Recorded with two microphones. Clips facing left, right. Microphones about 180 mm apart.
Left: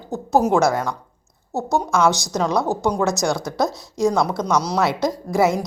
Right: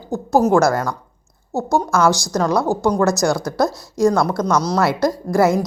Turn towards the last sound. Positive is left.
turn(degrees=0)  # may be behind; listen again after turning